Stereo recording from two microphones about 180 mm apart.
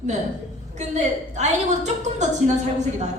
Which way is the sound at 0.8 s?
40° right (ahead or behind).